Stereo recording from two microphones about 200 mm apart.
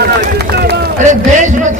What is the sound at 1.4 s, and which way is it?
Speech, 40° right (ahead or behind).